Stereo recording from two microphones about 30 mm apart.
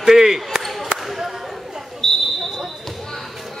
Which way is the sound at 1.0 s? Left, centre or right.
Centre.